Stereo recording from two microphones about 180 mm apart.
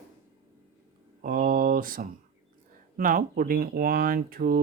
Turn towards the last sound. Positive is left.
turn(degrees=-55)  # may be behind; listen again after turning